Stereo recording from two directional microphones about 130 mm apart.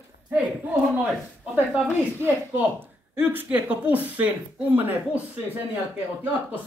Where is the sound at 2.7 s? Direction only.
15° right (ahead or behind).